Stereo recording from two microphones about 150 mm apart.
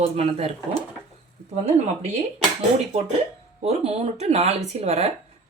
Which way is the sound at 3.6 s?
45° right (ahead or behind).